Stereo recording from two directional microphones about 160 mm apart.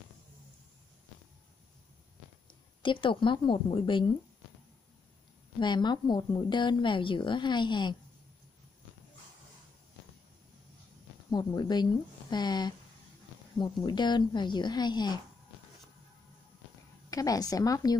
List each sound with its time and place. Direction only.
2.8 s a woman's voice: 30° left (ahead or behind)
5.6 s a woman's voice: 30° left (ahead or behind)
11.2 s a woman's voice: 25° left (ahead or behind)
17.1 s a woman's voice: 20° left (ahead or behind)